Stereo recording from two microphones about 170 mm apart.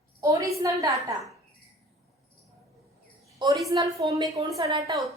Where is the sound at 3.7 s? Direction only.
20° right (ahead or behind).